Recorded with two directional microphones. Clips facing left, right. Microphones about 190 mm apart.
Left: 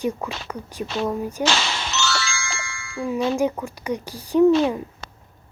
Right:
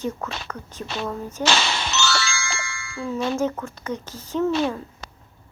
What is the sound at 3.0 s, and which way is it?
Speech, 15° left (ahead or behind).